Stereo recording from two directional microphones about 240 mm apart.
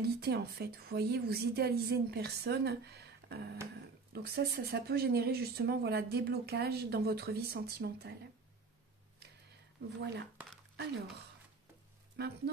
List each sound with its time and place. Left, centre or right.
0.0 s speech: right
9.9 s speech: right